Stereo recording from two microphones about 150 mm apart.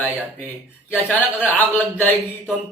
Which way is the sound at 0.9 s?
15° left (ahead or behind).